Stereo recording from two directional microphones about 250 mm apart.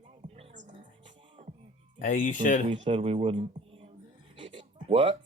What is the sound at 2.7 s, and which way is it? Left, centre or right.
Speech, right.